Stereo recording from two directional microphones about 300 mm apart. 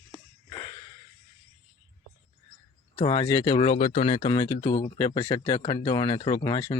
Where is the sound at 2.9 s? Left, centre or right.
Centre.